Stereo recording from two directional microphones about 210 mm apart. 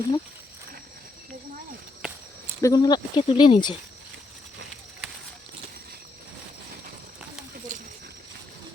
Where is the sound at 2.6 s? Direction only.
20° left (ahead or behind).